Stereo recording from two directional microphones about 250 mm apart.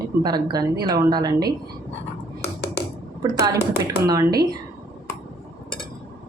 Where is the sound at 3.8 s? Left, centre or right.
Centre.